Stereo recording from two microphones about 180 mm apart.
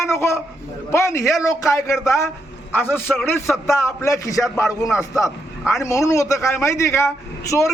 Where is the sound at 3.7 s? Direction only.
15° left (ahead or behind).